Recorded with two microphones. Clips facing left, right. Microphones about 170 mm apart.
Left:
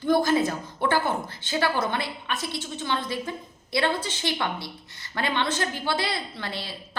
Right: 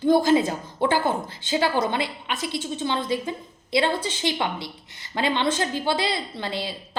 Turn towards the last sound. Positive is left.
turn(degrees=-20)  # may be behind; listen again after turning